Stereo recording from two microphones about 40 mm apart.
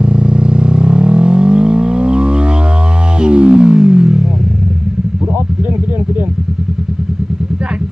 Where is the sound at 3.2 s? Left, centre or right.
Right.